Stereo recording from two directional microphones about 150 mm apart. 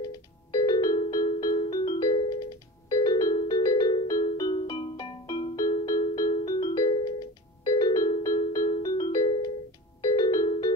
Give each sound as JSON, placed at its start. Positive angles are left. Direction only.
{"t": 0.0, "sound": "music", "side_deg": 25}